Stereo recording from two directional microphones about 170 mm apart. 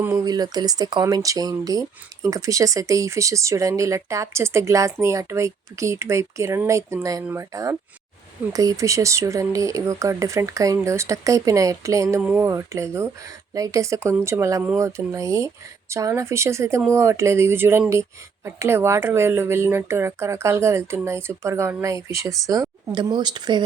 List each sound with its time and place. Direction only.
0.0 s speech: 20° right (ahead or behind)